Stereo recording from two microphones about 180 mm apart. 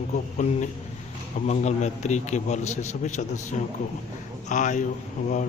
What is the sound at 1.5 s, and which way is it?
A man's voice, 40° left (ahead or behind).